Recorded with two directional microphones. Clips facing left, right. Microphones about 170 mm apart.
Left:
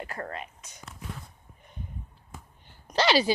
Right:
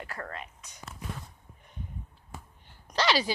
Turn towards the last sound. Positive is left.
turn(degrees=25)  # may be behind; listen again after turning